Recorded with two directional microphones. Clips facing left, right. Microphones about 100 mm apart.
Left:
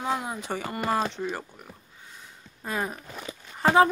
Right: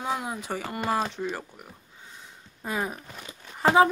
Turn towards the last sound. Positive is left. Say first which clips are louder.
# even
turn(degrees=-5)  # may be behind; listen again after turning